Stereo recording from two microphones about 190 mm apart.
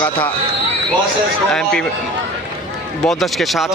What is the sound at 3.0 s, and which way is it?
Speech, centre (ahead or behind).